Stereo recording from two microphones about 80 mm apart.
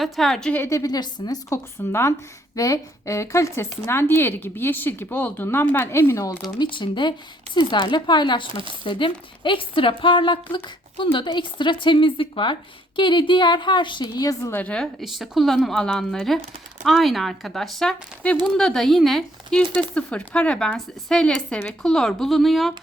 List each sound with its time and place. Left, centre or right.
0.0 s speech: centre
0.7 s a woman's voice: left
1.5 s speech: left
2.6 s speech: left
6.6 s a woman's voice: left
7.5 s speech: left
8.8 s a woman's voice: left
14.5 s speech: centre
15.0 s speech: centre